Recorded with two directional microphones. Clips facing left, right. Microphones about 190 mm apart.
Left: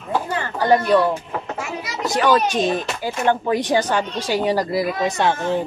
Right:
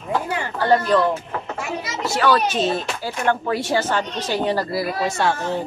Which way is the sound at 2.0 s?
15° left (ahead or behind).